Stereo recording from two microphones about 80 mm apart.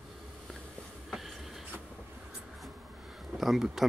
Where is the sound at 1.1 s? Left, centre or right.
Centre.